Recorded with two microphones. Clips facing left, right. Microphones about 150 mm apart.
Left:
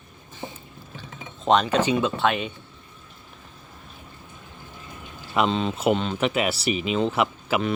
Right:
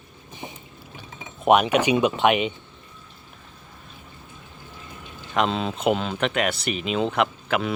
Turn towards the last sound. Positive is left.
turn(degrees=5)  # may be behind; listen again after turning